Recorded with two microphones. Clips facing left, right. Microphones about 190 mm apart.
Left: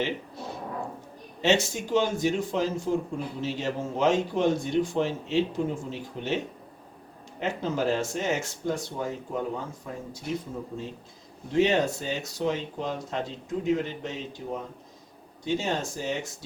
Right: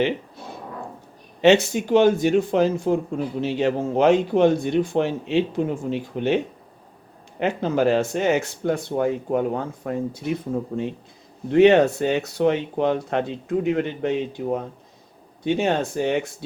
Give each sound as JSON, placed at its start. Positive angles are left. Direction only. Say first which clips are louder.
{"t": 1.4, "sound": "speech", "louder": "right 8 dB", "side_deg": -65}